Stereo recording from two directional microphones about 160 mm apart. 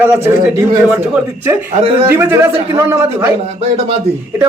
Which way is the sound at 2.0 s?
15° right (ahead or behind).